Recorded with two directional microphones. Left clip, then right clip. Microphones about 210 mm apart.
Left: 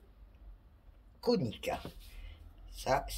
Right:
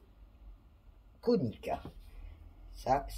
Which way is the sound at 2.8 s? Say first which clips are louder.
Right 1 dB; 15° right (ahead or behind).